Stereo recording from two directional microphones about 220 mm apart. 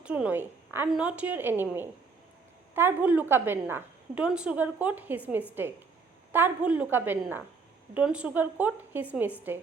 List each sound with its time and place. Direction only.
0.0 s a woman's voice: 5° right (ahead or behind)